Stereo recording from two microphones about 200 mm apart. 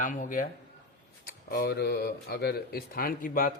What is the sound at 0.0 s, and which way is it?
Speech, 40° left (ahead or behind).